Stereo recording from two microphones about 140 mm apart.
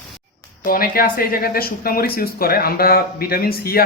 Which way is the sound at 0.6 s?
90° left.